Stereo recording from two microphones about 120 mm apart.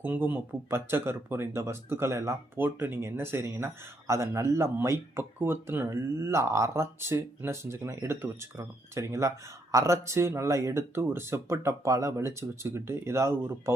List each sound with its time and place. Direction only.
0.0 s speech: 15° right (ahead or behind)